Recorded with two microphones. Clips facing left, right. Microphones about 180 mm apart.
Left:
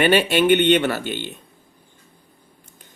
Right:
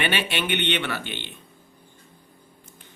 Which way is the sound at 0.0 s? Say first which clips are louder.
Left 10 dB; 45° left (ahead or behind).